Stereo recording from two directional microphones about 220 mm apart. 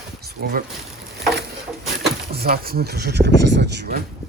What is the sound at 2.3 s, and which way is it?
Speech, 45° right (ahead or behind).